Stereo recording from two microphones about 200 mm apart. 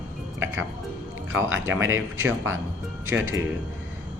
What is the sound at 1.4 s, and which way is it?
Speech, 75° right (ahead or behind).